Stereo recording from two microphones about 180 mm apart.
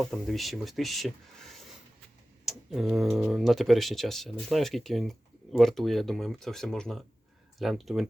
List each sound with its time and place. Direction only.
0.0 s speech: centre (ahead or behind)